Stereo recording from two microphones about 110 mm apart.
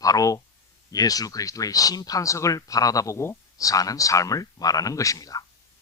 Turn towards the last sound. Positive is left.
turn(degrees=35)  # may be behind; listen again after turning